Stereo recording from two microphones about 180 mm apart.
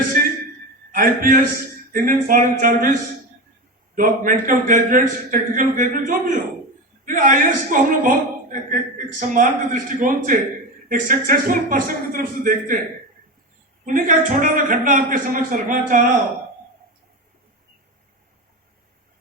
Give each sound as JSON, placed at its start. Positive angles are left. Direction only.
{"t": 0.1, "sound": "a sound", "side_deg": -50}
{"t": 0.9, "sound": "a man's voice", "side_deg": -50}
{"t": 13.8, "sound": "a man's voice", "side_deg": -45}